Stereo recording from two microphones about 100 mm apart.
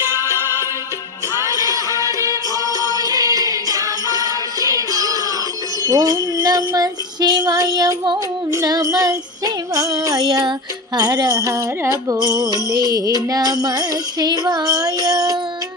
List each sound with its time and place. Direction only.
0.0 s music: 25° right (ahead or behind)